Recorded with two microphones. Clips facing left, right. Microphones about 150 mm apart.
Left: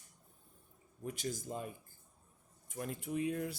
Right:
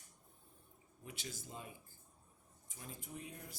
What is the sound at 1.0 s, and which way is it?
Speech, 45° left (ahead or behind).